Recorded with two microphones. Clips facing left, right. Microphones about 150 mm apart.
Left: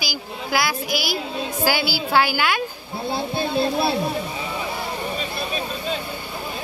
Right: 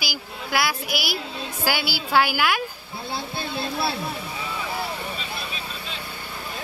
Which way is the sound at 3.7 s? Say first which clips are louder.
Left 6 dB; 20° left (ahead or behind).